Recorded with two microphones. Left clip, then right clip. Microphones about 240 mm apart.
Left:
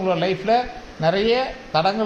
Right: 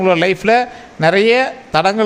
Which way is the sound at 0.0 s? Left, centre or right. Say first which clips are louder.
Right 8 dB; right.